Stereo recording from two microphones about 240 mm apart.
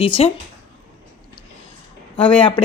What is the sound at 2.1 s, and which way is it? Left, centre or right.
Speech, centre.